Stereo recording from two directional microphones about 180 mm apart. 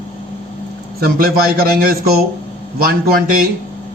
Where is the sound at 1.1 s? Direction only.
55° right (ahead or behind).